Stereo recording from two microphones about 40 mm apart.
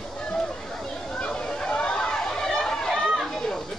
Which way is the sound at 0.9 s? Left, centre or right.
Left.